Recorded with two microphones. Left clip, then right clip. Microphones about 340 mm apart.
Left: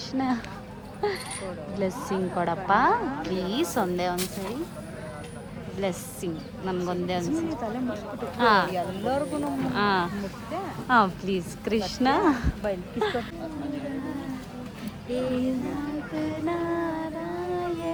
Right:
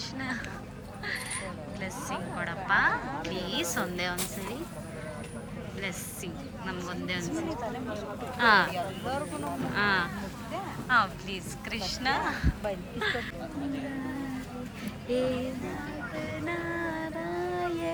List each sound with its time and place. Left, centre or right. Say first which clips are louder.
0.1 s a woman's voice: left 12 dB; centre
2.4 s a woman's voice: left 4 dB; centre
5.8 s a woman's voice: left 8 dB; centre
8.7 s speech: left 5 dB; left
9.7 s a woman's voice: left 2 dB; centre
15.1 s a sound: even; centre
16.5 s music: left 4 dB; centre
17.5 s a sound: left 4 dB; centre